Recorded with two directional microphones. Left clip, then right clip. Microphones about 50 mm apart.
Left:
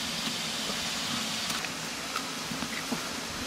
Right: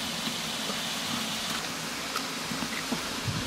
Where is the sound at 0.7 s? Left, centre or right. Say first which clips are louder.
Even; centre.